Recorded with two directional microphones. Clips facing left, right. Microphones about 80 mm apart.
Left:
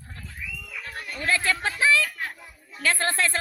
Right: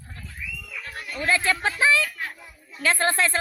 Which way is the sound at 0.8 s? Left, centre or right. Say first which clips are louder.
Even; left.